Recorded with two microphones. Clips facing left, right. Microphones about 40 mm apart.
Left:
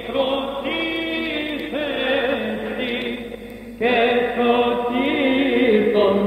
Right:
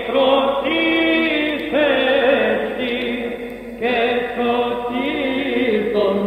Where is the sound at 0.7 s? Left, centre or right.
Right.